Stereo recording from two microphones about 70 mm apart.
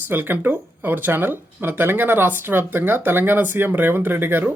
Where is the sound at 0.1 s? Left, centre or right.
Right.